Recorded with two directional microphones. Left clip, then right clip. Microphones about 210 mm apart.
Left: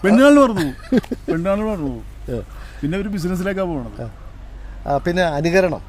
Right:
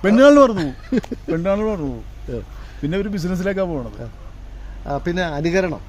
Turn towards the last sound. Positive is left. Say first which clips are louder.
# left 3 dB
turn(degrees=45)  # may be behind; listen again after turning